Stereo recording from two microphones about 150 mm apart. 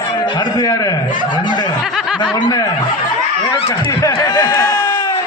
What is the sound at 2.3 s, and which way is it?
Speech, 25° left (ahead or behind).